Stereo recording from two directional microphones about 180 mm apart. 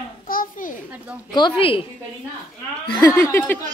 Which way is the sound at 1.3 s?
25° left (ahead or behind).